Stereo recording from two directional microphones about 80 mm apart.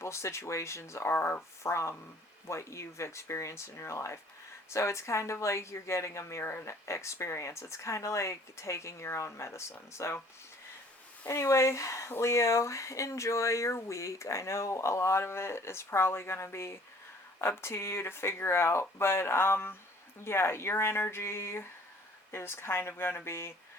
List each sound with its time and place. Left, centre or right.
0.0 s speech: left
1.1 s speech: left
1.6 s speech: left
11.3 s speech: left